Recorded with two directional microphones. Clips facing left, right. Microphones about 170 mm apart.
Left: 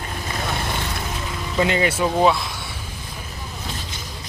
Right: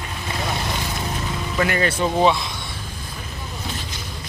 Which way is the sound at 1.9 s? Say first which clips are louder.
Even; 5° left (ahead or behind).